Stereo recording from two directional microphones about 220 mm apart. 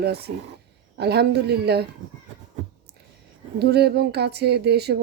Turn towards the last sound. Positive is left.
turn(degrees=-50)  # may be behind; listen again after turning